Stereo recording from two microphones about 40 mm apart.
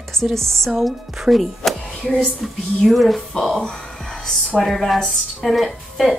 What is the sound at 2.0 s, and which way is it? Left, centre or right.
Speech, centre.